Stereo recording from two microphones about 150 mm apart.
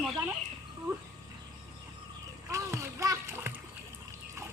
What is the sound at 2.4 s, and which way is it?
Splash, 20° right (ahead or behind).